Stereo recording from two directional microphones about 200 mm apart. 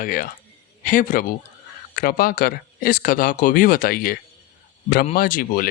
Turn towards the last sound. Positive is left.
turn(degrees=45)  # may be behind; listen again after turning